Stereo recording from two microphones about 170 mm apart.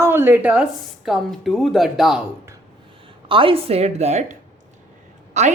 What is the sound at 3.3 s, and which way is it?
A woman's voice, 30° right (ahead or behind).